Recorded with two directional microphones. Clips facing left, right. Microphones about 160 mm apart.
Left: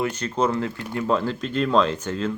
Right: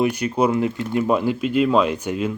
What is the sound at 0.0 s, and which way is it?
Speech, 10° right (ahead or behind).